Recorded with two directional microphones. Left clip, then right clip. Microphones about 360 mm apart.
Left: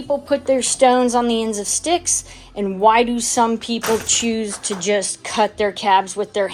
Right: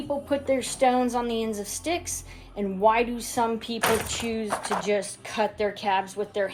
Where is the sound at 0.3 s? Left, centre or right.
Left.